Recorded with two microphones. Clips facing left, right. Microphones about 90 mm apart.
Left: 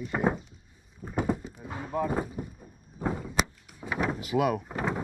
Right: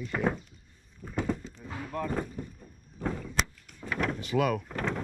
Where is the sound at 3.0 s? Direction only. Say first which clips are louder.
Left 3 dB; 15° left (ahead or behind).